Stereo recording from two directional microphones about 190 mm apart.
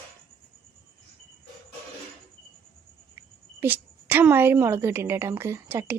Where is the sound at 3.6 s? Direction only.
10° right (ahead or behind).